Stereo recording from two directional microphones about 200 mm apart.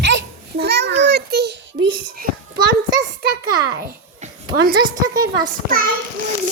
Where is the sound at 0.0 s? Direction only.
60° right (ahead or behind).